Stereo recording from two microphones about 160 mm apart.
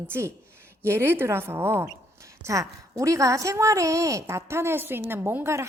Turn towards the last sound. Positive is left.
turn(degrees=-15)  # may be behind; listen again after turning